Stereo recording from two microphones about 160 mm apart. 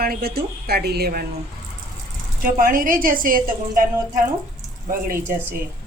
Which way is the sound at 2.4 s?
60° right (ahead or behind).